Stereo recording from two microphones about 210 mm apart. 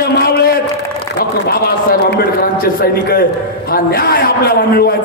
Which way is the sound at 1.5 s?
45° left (ahead or behind).